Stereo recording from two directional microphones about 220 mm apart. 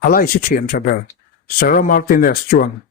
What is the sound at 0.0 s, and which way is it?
Speech, 40° left (ahead or behind).